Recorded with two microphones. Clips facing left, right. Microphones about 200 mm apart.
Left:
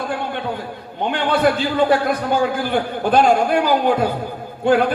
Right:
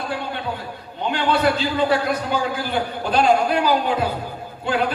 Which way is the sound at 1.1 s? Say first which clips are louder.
Left 2 dB; 50° left (ahead or behind).